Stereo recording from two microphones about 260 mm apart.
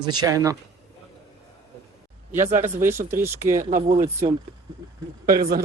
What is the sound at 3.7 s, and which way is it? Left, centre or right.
Speech, right.